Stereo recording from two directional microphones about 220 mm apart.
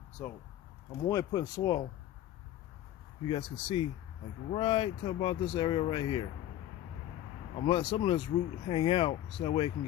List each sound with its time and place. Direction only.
0.2 s speech: 5° left (ahead or behind)
1.0 s speech: 15° left (ahead or behind)
3.2 s speech: 25° left (ahead or behind)
7.5 s speech: 25° left (ahead or behind)